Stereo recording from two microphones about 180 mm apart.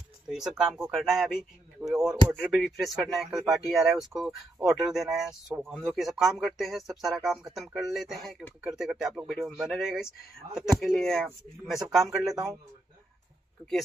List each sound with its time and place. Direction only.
0.3 s speech: 5° right (ahead or behind)
12.3 s a man's voice: 20° right (ahead or behind)
13.6 s speech: 5° right (ahead or behind)